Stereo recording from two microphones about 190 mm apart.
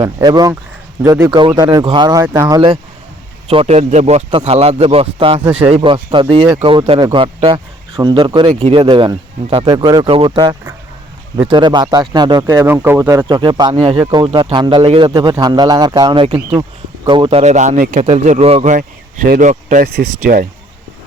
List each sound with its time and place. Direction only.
0.0 s speech: 20° right (ahead or behind)
3.4 s a man's voice: 30° right (ahead or behind)
19.9 s speech: 55° right (ahead or behind)